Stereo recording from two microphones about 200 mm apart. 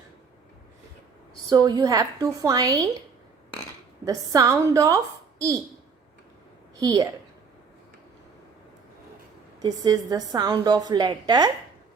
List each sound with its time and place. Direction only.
1.5 s a woman's voice: 20° right (ahead or behind)
4.0 s a woman's voice: 15° right (ahead or behind)
6.7 s a woman's voice: 15° right (ahead or behind)
9.6 s a woman's voice: 20° right (ahead or behind)